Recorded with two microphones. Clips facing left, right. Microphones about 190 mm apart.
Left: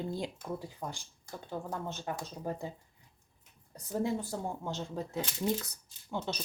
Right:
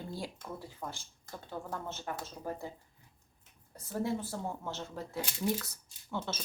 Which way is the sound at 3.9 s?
15° left (ahead or behind).